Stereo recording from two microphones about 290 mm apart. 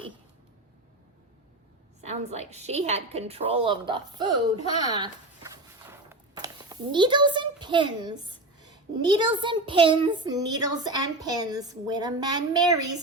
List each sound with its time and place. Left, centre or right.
2.0 s a woman's voice: right
5.9 s a sound: centre
9.0 s a child's voice: centre